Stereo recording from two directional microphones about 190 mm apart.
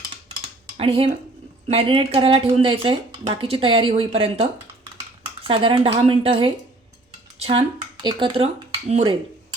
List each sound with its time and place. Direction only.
0.8 s speech: 30° right (ahead or behind)